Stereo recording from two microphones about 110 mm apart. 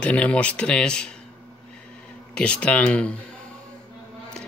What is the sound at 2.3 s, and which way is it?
Speech, 10° left (ahead or behind).